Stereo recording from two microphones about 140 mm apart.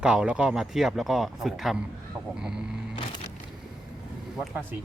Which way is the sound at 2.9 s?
35° left (ahead or behind).